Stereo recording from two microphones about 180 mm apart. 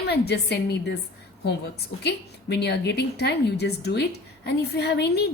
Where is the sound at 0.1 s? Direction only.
65° left (ahead or behind).